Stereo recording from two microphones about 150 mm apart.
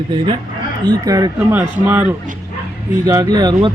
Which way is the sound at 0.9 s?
25° right (ahead or behind).